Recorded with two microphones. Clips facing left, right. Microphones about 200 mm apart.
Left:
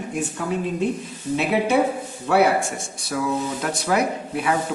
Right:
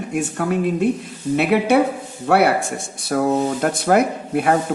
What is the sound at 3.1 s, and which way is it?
Speech, 50° right (ahead or behind).